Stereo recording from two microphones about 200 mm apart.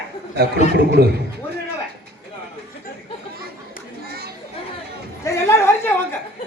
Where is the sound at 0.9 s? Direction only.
55° right (ahead or behind).